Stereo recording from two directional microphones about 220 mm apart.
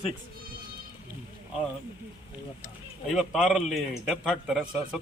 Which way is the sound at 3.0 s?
Centre (ahead or behind).